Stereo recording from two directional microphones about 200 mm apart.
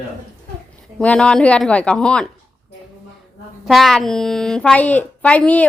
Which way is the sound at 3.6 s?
Centre (ahead or behind).